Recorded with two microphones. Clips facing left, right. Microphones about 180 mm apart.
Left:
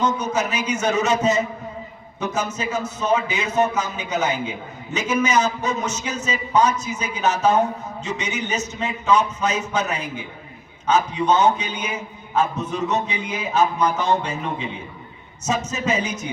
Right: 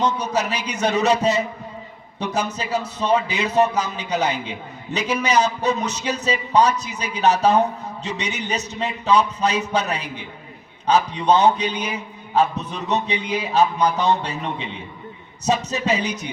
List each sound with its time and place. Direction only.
0.0 s a man's voice: 35° right (ahead or behind)